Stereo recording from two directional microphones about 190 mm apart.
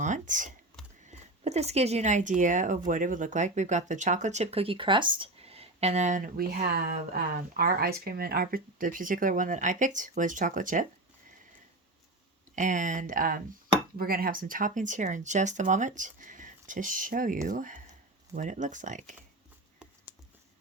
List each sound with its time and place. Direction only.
0.0 s speech: 40° right (ahead or behind)
12.5 s speech: 40° right (ahead or behind)
19.8 s a sound: 5° right (ahead or behind)